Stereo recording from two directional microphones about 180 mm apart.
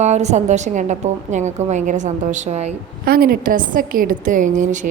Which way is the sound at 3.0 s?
55° right (ahead or behind).